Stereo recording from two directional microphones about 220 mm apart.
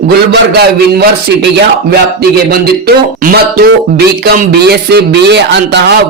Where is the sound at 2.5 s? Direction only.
45° right (ahead or behind).